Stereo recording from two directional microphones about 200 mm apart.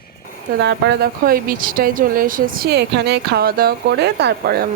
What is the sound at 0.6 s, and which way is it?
Speech, 60° right (ahead or behind).